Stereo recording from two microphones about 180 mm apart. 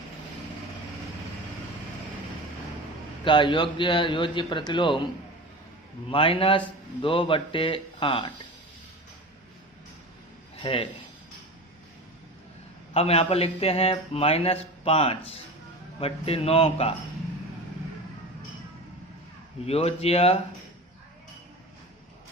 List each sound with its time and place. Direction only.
3.2 s a man's voice: 25° left (ahead or behind)
6.1 s a man's voice: 30° left (ahead or behind)
10.6 s speech: 30° left (ahead or behind)
12.9 s a man's voice: 35° left (ahead or behind)
19.6 s a man's voice: 35° left (ahead or behind)